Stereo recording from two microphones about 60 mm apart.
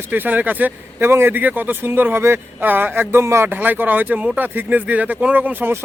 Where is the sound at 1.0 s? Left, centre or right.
Right.